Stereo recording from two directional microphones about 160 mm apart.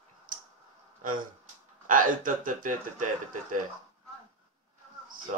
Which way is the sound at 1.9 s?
55° right (ahead or behind).